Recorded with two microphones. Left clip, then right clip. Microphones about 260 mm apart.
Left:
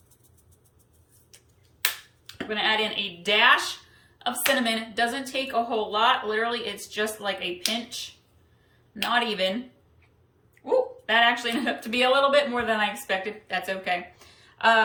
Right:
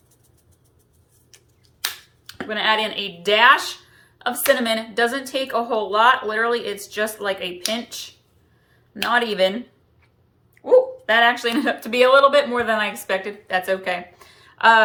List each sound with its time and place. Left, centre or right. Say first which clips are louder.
1.3 s finger snapping: right 3 dB; centre
1.8 s a woman's voice: even; centre
9.0 s a woman's voice: right 6 dB; centre
10.6 s a woman's voice: right 9 dB; centre